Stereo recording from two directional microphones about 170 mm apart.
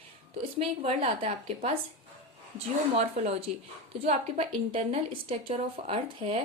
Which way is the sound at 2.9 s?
40° right (ahead or behind).